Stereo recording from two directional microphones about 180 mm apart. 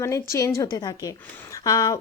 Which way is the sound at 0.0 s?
15° left (ahead or behind).